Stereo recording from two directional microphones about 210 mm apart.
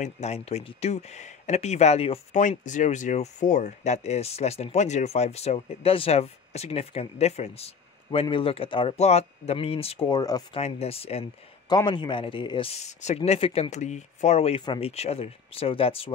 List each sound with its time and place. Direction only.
0.0 s speech: 30° left (ahead or behind)
10.6 s speech: 30° left (ahead or behind)